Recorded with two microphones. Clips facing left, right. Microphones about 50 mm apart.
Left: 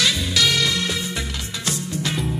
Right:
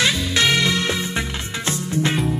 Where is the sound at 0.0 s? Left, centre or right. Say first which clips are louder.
Right 2 dB; right.